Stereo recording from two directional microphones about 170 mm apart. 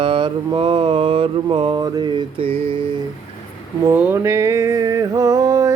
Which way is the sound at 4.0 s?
15° right (ahead or behind).